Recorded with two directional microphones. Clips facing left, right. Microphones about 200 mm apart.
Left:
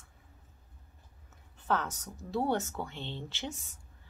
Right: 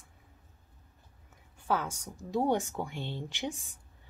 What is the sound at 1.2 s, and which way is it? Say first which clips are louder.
A woman's voice: right 1 dB; 10° right (ahead or behind).